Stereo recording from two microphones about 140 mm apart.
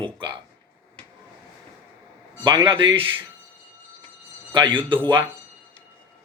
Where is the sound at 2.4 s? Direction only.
35° right (ahead or behind).